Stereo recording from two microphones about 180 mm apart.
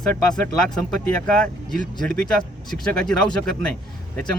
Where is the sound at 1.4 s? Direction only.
5° left (ahead or behind).